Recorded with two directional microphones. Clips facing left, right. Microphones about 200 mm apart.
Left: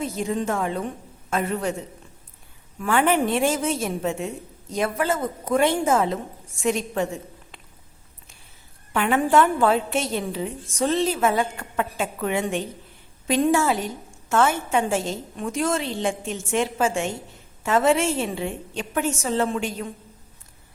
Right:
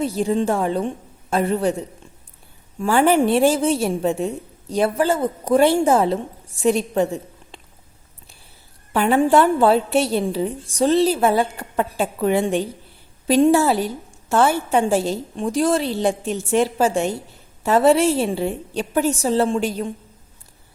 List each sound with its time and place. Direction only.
0.0 s a woman's voice: 35° right (ahead or behind)
2.7 s a woman's voice: 30° right (ahead or behind)
8.9 s a woman's voice: 35° right (ahead or behind)